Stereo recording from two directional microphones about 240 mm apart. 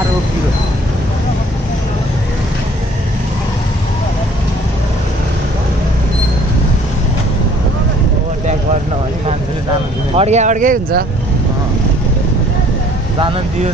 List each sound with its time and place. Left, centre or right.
10.1 s speech: right